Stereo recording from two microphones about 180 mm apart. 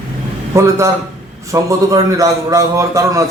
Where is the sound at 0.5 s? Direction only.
15° right (ahead or behind).